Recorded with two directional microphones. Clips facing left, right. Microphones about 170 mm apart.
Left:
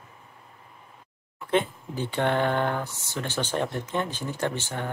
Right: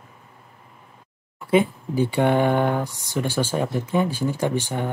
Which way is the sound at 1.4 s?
10° right (ahead or behind).